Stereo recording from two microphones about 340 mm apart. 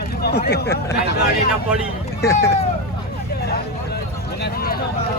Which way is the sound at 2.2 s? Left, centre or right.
Centre.